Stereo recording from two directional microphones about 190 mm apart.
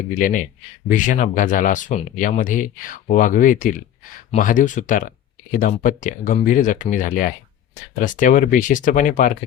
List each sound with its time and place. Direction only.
0.2 s speech: 45° left (ahead or behind)